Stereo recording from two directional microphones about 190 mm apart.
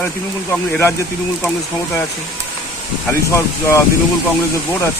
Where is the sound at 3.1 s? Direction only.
15° left (ahead or behind).